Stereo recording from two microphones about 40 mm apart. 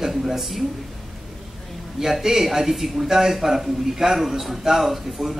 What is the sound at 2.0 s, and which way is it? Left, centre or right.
A man's voice, centre.